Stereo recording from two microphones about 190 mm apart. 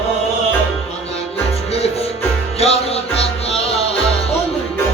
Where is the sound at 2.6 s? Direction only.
30° left (ahead or behind).